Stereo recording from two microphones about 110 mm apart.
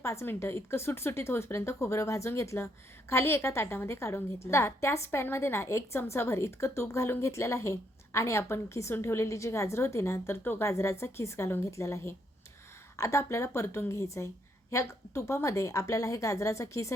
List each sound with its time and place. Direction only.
0.0 s a woman's voice: 25° left (ahead or behind)